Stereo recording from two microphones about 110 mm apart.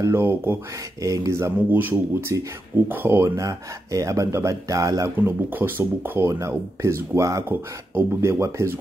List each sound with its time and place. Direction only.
0.0 s speech: 20° right (ahead or behind)
5.1 s speech: 20° right (ahead or behind)